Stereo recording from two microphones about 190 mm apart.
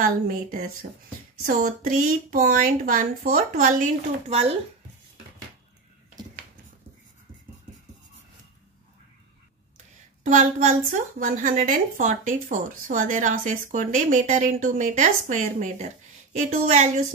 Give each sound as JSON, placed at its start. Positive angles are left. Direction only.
{"t": 0.0, "sound": "a woman's voice", "side_deg": -45}
{"t": 10.2, "sound": "a woman's voice", "side_deg": -45}